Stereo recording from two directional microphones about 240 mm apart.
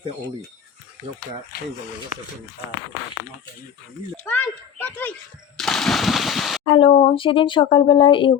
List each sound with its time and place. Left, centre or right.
1.5 s speech: left
4.2 s a child's voice: centre
5.5 s a sound: centre
6.7 s speech: left